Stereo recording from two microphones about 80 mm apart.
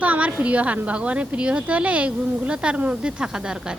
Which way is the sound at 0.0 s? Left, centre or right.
Centre.